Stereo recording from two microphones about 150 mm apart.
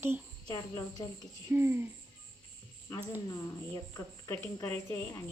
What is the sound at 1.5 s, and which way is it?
Speech, 15° right (ahead or behind).